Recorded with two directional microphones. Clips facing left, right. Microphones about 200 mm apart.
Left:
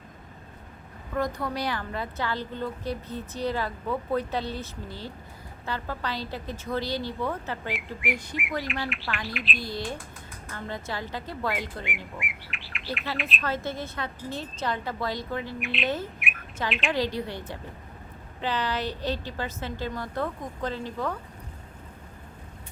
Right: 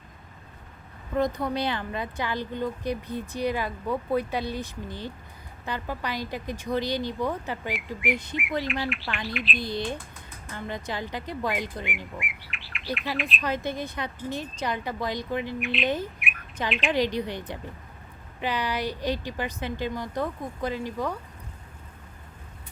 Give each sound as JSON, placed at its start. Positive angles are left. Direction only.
{"t": 1.1, "sound": "speech", "side_deg": -20}
{"t": 8.6, "sound": "speech", "side_deg": 0}
{"t": 9.6, "sound": "speech", "side_deg": -20}
{"t": 12.1, "sound": "bird", "side_deg": 0}
{"t": 13.4, "sound": "speech", "side_deg": -15}
{"t": 15.6, "sound": "speech", "side_deg": 0}
{"t": 16.2, "sound": "bird", "side_deg": 0}
{"t": 16.6, "sound": "speech", "side_deg": 0}
{"t": 16.9, "sound": "speech", "side_deg": -20}